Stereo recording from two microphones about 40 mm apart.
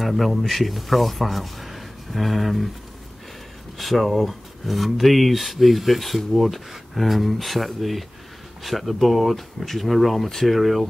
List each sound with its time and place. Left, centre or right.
0.0 s speech: centre
3.7 s speech: centre